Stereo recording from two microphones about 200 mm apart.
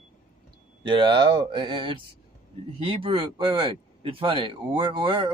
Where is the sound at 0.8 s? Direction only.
25° right (ahead or behind).